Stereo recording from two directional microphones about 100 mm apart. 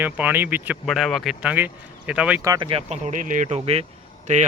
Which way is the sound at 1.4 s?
15° right (ahead or behind).